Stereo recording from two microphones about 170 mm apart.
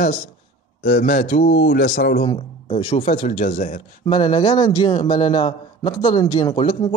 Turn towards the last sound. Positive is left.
turn(degrees=30)  # may be behind; listen again after turning